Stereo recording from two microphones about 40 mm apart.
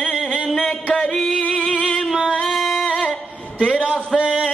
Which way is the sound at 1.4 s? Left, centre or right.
Left.